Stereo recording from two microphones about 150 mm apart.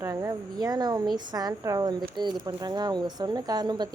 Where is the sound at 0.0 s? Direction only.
20° right (ahead or behind).